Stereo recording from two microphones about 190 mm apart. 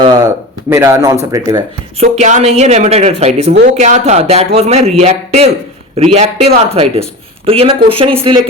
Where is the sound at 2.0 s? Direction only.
35° right (ahead or behind).